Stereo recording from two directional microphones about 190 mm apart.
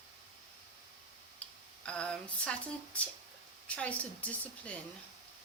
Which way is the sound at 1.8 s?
5° left (ahead or behind).